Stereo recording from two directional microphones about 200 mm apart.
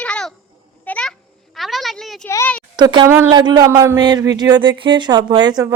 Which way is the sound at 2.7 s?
25° right (ahead or behind).